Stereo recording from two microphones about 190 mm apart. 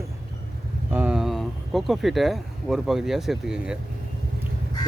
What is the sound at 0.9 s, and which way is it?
Speech, 10° right (ahead or behind).